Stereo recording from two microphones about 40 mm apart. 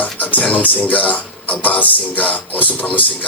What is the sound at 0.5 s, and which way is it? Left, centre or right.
Speech, left.